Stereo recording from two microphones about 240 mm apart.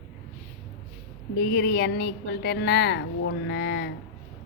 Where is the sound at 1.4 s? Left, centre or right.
Left.